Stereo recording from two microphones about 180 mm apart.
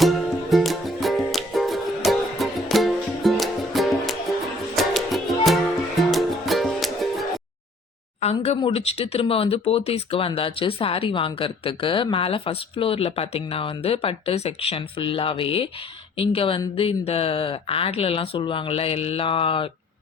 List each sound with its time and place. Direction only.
0.5 s music: centre (ahead or behind)
8.2 s speech: 35° left (ahead or behind)